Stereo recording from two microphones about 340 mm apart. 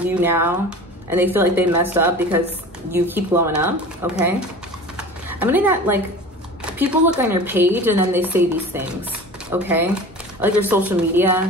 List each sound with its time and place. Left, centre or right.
0.0 s speech: centre
4.9 s a sound: centre
6.6 s a woman's voice: centre